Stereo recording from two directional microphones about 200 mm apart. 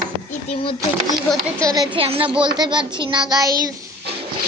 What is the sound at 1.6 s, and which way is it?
Child singing, 20° right (ahead or behind).